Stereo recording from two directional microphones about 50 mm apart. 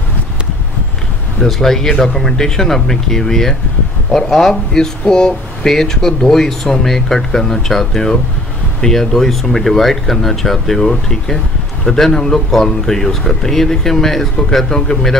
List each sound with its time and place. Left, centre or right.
1.4 s speech: centre